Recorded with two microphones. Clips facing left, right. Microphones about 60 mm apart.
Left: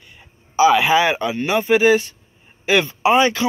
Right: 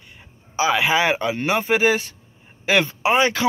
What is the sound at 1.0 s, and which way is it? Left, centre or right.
Speech, right.